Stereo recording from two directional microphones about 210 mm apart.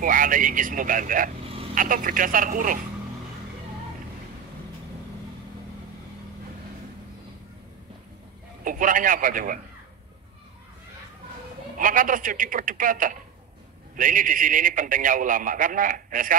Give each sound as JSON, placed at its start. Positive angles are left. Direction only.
{"t": 0.0, "sound": "a man's voice", "side_deg": -40}
{"t": 8.6, "sound": "a man's voice", "side_deg": -40}
{"t": 11.8, "sound": "a man's voice", "side_deg": -40}